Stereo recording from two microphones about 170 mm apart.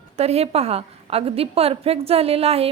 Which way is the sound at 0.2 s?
40° right (ahead or behind).